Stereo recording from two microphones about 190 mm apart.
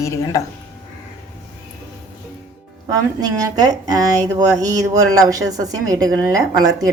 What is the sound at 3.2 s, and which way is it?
Speech, 20° right (ahead or behind).